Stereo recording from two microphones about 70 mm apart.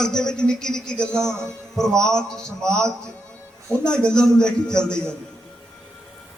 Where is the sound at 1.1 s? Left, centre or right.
Right.